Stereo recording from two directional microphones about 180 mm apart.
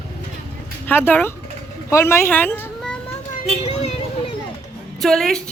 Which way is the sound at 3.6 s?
35° left (ahead or behind).